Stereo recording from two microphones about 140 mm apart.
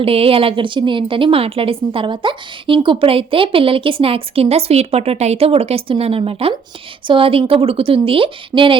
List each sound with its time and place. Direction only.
0.0 s a woman's voice: 45° right (ahead or behind)